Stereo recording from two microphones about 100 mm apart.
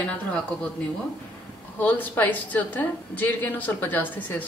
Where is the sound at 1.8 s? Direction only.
20° left (ahead or behind).